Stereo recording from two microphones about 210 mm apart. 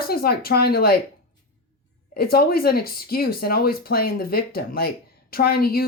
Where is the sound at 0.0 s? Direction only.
45° left (ahead or behind).